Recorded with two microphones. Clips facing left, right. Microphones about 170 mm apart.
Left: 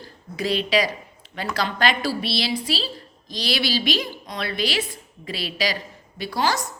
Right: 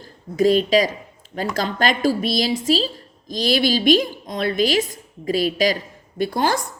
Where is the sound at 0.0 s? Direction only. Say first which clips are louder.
Right 11 dB; 45° right (ahead or behind).